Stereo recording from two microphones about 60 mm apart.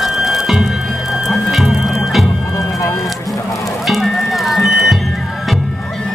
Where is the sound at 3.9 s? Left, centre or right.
Centre.